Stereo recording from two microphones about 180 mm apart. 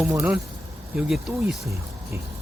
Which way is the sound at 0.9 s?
5° right (ahead or behind).